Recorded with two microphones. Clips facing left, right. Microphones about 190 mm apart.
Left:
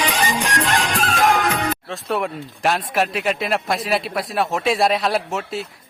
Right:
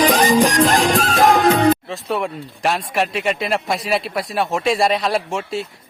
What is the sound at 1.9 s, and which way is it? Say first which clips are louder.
Speech: right 1 dB; centre (ahead or behind).